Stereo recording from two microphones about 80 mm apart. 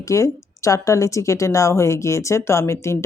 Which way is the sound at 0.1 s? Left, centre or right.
Left.